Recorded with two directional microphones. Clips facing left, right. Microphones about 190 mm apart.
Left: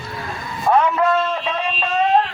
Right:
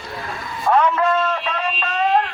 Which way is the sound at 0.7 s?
15° left (ahead or behind).